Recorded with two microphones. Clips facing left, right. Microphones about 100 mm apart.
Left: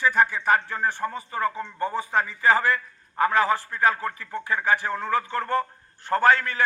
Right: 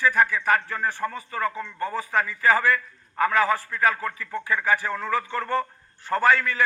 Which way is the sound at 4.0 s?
10° left (ahead or behind).